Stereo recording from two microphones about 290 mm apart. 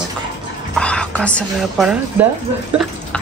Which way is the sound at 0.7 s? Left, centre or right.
Centre.